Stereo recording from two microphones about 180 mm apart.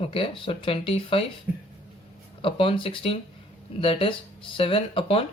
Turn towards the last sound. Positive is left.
turn(degrees=30)  # may be behind; listen again after turning